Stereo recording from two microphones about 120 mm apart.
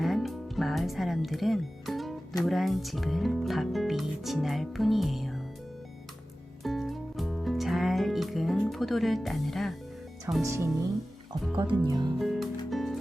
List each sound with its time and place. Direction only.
0.0 s music: centre (ahead or behind)
2.4 s speech: centre (ahead or behind)
6.6 s music: centre (ahead or behind)
10.4 s speech: 25° right (ahead or behind)
11.5 s speech: 40° right (ahead or behind)
12.2 s music: centre (ahead or behind)